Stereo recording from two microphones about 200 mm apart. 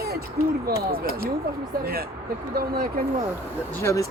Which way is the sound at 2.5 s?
50° right (ahead or behind).